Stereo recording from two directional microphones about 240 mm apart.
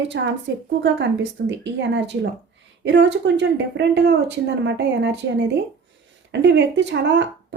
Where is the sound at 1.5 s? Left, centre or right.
Right.